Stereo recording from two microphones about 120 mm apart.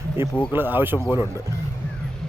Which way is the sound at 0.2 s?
20° right (ahead or behind).